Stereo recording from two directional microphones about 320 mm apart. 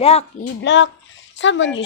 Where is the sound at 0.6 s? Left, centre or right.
Left.